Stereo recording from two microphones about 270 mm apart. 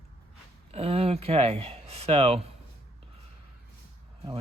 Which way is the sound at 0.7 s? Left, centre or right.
Right.